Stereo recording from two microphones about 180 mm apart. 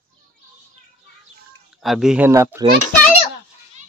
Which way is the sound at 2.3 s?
15° right (ahead or behind).